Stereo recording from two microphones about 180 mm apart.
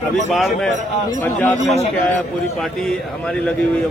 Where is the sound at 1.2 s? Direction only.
10° left (ahead or behind).